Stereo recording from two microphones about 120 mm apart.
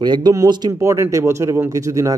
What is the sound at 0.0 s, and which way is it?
A man's voice, 35° right (ahead or behind).